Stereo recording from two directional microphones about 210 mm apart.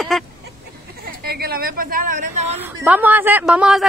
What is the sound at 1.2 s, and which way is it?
A woman's voice, 45° right (ahead or behind).